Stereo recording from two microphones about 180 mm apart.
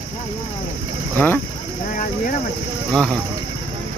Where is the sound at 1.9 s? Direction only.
50° left (ahead or behind).